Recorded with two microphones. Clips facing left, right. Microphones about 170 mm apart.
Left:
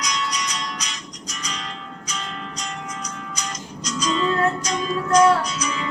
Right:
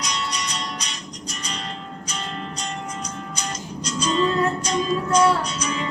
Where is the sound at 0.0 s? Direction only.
30° right (ahead or behind).